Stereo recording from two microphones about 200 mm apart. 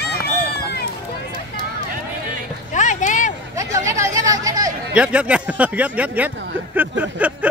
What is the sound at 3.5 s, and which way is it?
Hubbub, 15° right (ahead or behind).